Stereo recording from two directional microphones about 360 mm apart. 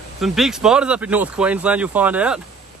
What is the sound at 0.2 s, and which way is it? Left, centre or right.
Speech, centre.